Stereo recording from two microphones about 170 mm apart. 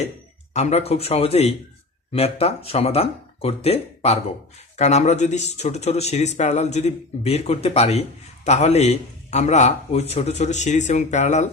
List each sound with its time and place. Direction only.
0.5 s speech: 40° left (ahead or behind)